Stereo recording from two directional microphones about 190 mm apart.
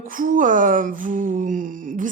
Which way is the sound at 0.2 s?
45° right (ahead or behind).